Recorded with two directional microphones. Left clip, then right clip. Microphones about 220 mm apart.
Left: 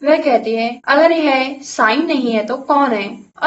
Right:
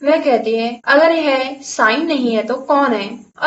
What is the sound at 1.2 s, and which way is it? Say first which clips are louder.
A woman's voice: left 1 dB; 20° left (ahead or behind).